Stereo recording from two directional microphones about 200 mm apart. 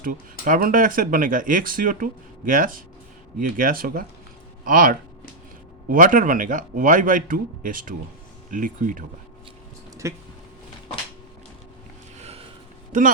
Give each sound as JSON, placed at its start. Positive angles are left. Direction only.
{"t": 0.0, "sound": "speech", "side_deg": -45}
{"t": 10.0, "sound": "speech", "side_deg": -15}
{"t": 12.9, "sound": "speech", "side_deg": -40}